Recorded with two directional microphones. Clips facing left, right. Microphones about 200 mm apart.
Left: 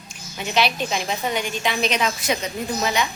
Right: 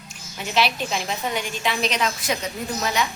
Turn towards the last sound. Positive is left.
turn(degrees=0)  # may be behind; listen again after turning